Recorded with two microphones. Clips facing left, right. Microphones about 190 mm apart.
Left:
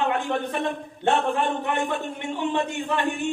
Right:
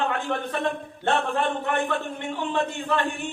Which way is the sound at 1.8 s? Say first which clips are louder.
Even; 15° left (ahead or behind).